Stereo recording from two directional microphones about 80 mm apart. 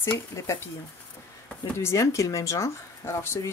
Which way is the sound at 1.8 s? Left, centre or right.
Left.